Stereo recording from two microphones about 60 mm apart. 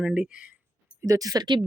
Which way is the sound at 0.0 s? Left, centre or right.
Centre.